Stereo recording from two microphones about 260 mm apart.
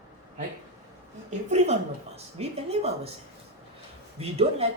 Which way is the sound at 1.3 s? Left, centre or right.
Right.